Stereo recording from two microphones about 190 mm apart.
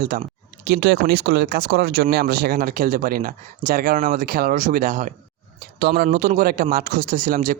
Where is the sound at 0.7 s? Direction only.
60° right (ahead or behind); by 5.1 s 40° right (ahead or behind).